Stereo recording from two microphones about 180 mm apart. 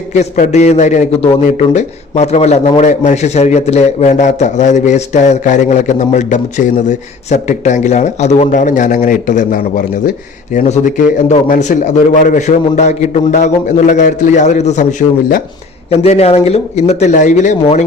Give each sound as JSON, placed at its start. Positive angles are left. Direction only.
{"t": 0.1, "sound": "a man's voice", "side_deg": 40}